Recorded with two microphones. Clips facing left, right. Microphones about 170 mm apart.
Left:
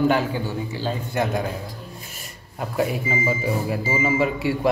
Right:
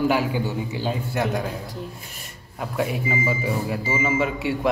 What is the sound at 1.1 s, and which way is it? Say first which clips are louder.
Speech: left 2 dB; centre (ahead or behind).